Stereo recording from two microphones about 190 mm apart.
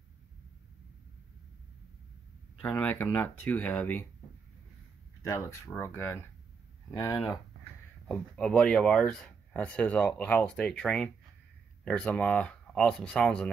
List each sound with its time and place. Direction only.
2.6 s speech: 10° left (ahead or behind)
5.2 s speech: 15° left (ahead or behind)
6.9 s speech: 15° left (ahead or behind)
8.1 s speech: 5° left (ahead or behind)